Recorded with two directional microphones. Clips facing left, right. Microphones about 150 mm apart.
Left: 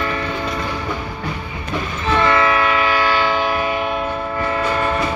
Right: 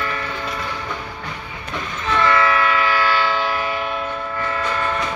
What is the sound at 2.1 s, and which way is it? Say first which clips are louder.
Train: left 2 dB; 20° left (ahead or behind).